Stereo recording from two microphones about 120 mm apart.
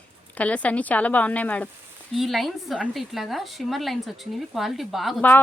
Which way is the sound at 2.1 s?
Centre (ahead or behind).